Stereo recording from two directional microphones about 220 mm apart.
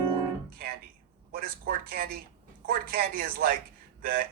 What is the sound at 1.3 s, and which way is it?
A man's voice, 45° right (ahead or behind).